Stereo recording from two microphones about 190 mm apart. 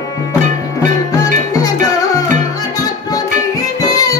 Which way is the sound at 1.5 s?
20° left (ahead or behind).